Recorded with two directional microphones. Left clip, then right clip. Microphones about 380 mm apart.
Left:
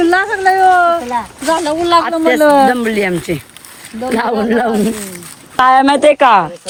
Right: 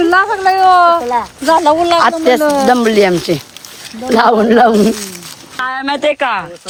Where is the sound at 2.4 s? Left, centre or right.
Left.